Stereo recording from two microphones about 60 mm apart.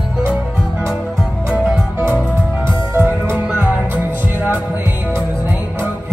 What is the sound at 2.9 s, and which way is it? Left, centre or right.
Music, right.